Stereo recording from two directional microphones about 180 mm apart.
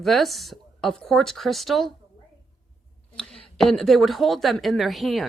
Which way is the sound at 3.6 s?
Centre (ahead or behind).